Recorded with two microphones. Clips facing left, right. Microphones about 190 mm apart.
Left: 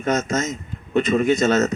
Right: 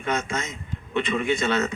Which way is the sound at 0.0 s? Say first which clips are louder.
Left 6 dB; 40° left (ahead or behind).